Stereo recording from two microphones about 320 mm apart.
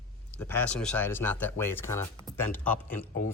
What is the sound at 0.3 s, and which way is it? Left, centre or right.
Speech, centre.